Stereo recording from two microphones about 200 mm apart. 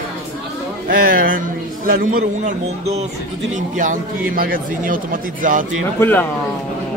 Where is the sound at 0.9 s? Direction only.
45° right (ahead or behind).